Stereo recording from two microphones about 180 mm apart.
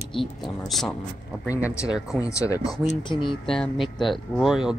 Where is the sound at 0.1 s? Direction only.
Centre (ahead or behind).